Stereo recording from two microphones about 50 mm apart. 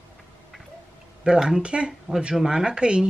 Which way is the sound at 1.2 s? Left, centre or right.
Centre.